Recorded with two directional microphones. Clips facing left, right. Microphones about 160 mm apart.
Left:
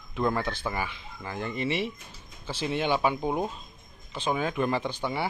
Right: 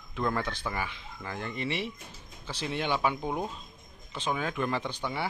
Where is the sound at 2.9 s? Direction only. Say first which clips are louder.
Left 3 dB; 25° left (ahead or behind).